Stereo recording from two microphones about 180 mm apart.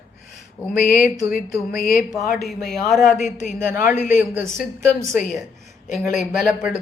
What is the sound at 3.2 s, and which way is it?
A man's voice, 40° left (ahead or behind).